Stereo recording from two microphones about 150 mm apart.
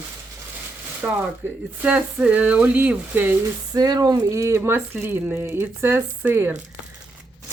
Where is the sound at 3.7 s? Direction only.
25° right (ahead or behind).